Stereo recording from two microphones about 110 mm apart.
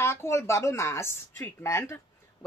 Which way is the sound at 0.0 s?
25° left (ahead or behind).